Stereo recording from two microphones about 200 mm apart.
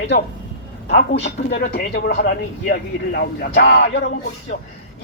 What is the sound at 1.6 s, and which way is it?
Speech, 50° left (ahead or behind).